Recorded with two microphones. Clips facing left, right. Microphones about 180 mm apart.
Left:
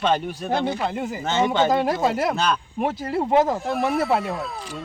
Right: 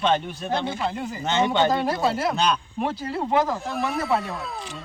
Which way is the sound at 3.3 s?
25° left (ahead or behind).